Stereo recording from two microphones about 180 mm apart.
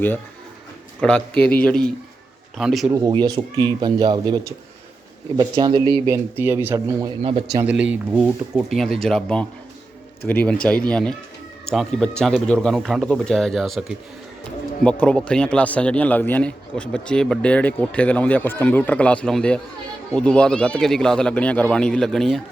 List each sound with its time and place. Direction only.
1.0 s speech: 5° left (ahead or behind)
2.9 s speech: 25° right (ahead or behind)
7.2 s speech: 30° right (ahead or behind)
7.5 s a man's voice: 10° right (ahead or behind)